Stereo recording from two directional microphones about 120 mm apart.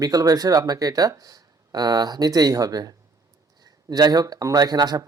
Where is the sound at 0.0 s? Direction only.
30° right (ahead or behind).